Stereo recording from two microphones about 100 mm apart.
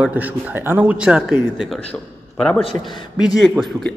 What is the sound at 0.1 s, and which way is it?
Speech, 15° right (ahead or behind).